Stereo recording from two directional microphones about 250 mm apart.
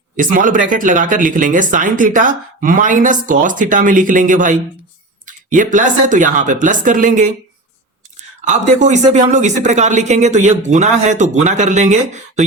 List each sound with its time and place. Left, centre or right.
0.2 s speech: right
8.4 s speech: right